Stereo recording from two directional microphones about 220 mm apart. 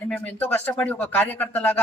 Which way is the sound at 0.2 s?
5° left (ahead or behind).